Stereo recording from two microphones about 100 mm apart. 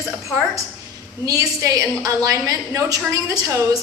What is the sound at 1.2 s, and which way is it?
A woman's voice, 35° right (ahead or behind).